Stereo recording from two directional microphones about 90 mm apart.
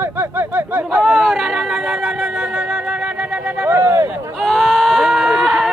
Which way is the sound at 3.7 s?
30° right (ahead or behind).